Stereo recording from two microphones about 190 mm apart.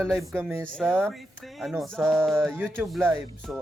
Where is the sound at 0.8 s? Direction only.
Centre (ahead or behind).